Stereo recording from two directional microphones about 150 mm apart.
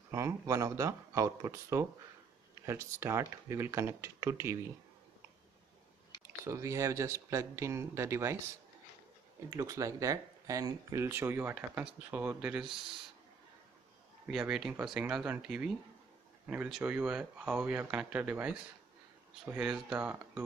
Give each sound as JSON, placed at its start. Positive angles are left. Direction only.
{"t": 0.1, "sound": "speech", "side_deg": -20}
{"t": 6.4, "sound": "speech", "side_deg": -20}
{"t": 9.5, "sound": "speech", "side_deg": -20}
{"t": 14.2, "sound": "speech", "side_deg": -5}